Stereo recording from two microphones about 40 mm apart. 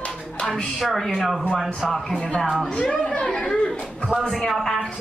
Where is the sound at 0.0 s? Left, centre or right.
Left.